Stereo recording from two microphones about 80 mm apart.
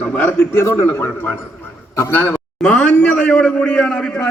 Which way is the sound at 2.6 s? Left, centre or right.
Centre.